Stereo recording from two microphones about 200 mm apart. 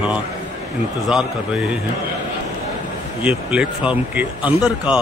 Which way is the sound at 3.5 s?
5° right (ahead or behind).